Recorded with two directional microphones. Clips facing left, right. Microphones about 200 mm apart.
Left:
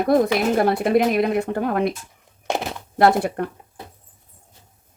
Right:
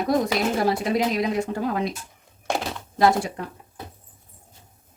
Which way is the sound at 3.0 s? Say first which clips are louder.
Left 3 dB; 60° left (ahead or behind).